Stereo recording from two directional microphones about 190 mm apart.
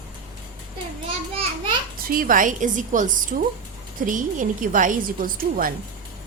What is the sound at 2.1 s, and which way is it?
A woman's voice, 45° right (ahead or behind).